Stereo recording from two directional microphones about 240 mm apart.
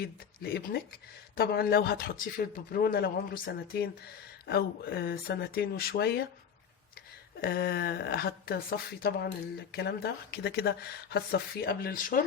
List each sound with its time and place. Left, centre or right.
0.0 s speech: left
7.4 s speech: left